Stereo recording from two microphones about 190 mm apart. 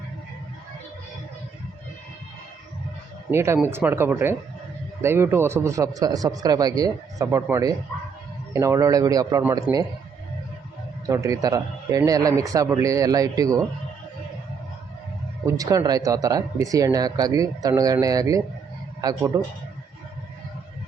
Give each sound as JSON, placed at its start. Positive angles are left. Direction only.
{"t": 3.3, "sound": "speech", "side_deg": -15}
{"t": 11.1, "sound": "speech", "side_deg": -15}
{"t": 15.4, "sound": "speech", "side_deg": -20}